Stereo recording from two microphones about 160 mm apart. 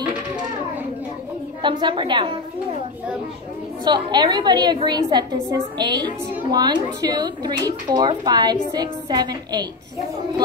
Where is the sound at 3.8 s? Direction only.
25° right (ahead or behind).